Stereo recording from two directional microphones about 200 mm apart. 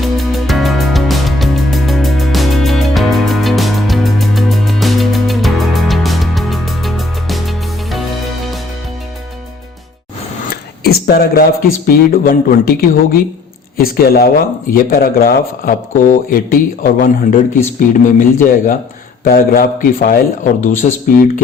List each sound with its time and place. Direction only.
0.0 s music: centre (ahead or behind)
10.5 s speech: 50° left (ahead or behind)